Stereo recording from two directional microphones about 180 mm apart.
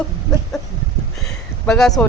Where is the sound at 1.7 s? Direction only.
Centre (ahead or behind).